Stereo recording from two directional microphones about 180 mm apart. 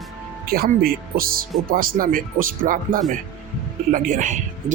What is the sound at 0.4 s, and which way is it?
Speech, 55° right (ahead or behind).